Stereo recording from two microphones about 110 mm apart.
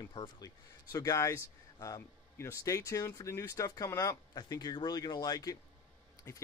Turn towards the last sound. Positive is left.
turn(degrees=35)  # may be behind; listen again after turning